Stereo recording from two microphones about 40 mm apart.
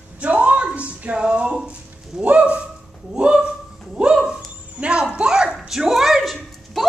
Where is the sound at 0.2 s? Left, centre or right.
Right.